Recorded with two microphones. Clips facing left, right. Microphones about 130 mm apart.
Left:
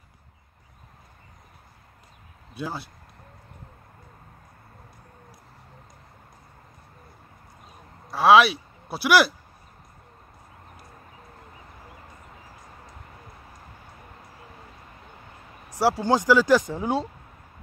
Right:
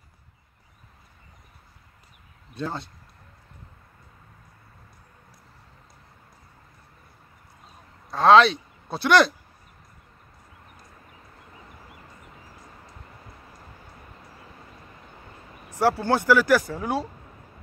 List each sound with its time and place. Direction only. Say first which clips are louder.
2.5 s speech: right 1 dB; 5° left (ahead or behind)
8.1 s speech: right 1 dB; 10° left (ahead or behind)
15.7 s speech: even; 15° left (ahead or behind)